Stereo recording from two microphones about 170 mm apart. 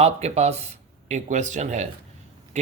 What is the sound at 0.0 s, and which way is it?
Speech, 40° right (ahead or behind).